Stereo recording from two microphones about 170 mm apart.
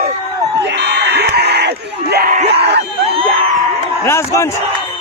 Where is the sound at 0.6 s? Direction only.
85° right; by 2.6 s 70° right (ahead or behind).